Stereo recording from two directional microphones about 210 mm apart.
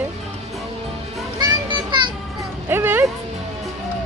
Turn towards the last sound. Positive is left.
turn(degrees=-10)  # may be behind; listen again after turning